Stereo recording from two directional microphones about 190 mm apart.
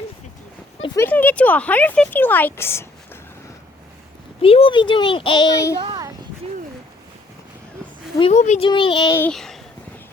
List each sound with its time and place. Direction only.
0.9 s speech: 10° left (ahead or behind)
4.4 s a child's voice: 30° left (ahead or behind)
5.8 s a sound: 25° right (ahead or behind)
8.2 s a child's voice: 35° left (ahead or behind)
9.1 s speech: 5° left (ahead or behind)